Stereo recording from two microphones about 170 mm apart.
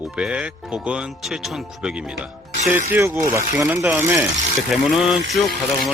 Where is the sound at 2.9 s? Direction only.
15° right (ahead or behind).